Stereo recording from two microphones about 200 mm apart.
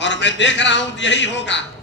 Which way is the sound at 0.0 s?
65° left (ahead or behind).